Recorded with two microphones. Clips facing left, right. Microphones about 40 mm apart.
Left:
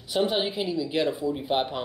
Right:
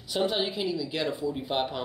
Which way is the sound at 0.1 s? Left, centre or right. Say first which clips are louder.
Left 2 dB; centre.